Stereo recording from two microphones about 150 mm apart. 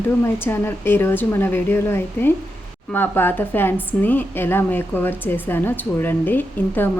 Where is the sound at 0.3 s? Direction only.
15° left (ahead or behind).